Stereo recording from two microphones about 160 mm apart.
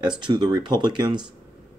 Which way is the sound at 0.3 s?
25° right (ahead or behind).